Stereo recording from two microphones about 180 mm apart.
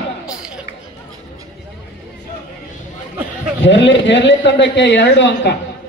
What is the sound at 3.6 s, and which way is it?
Speech, 85° left.